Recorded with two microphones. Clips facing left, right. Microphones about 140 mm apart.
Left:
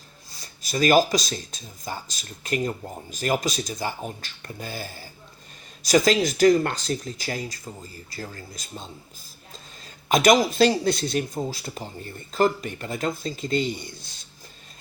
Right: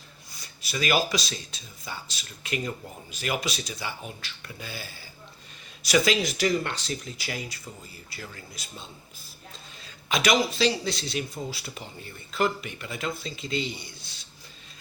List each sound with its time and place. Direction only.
0.6 s speech: 40° left (ahead or behind)